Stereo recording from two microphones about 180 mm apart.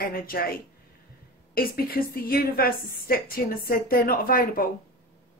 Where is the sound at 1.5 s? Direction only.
55° left (ahead or behind).